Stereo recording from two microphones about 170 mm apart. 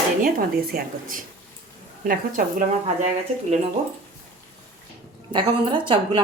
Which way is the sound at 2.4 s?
55° right (ahead or behind).